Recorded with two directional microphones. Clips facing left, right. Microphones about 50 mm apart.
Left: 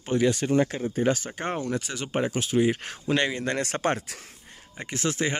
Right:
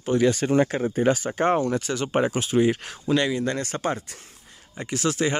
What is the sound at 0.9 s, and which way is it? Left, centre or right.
Speech, centre.